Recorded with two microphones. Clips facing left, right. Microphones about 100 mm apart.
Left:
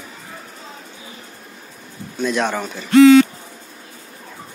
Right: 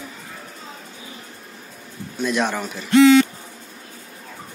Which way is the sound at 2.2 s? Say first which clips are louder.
Left 2 dB; centre (ahead or behind).